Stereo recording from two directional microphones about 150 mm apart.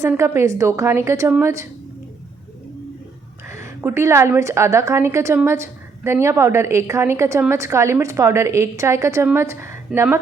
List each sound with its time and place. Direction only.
0.1 s a woman's voice: 20° right (ahead or behind)
3.4 s a woman's voice: 20° right (ahead or behind)